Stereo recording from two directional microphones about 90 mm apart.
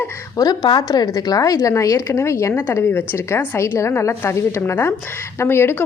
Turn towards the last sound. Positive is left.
turn(degrees=25)  # may be behind; listen again after turning